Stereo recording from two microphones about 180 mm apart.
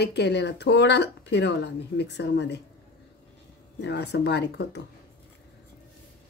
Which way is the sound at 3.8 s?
70° left (ahead or behind).